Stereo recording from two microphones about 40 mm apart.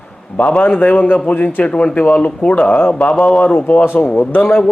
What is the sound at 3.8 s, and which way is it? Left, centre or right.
Speech, left.